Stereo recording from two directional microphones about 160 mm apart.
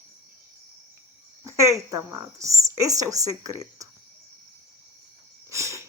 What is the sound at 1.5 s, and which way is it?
Speech, 20° right (ahead or behind).